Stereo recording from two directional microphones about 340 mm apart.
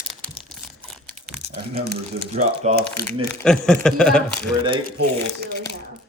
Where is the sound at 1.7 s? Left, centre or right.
Right.